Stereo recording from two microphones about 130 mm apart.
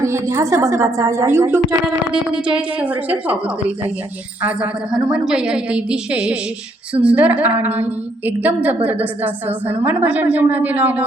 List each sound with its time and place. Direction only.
0.0 s a woman's voice: 20° right (ahead or behind)
2.1 s a woman's voice: 5° right (ahead or behind)